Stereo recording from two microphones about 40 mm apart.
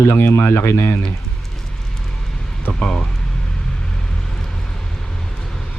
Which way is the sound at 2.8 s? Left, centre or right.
Left.